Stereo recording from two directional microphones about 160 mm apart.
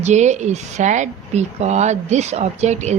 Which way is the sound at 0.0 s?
45° right (ahead or behind).